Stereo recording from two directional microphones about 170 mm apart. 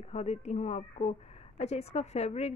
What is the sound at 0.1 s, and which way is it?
A woman's voice, 40° left (ahead or behind).